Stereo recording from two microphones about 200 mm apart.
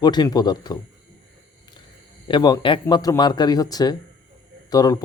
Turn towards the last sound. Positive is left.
turn(degrees=20)  # may be behind; listen again after turning